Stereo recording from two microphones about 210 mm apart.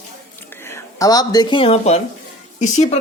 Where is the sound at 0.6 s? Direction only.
15° left (ahead or behind).